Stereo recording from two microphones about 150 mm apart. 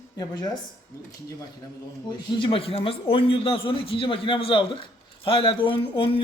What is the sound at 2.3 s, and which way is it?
Speech, 35° left (ahead or behind).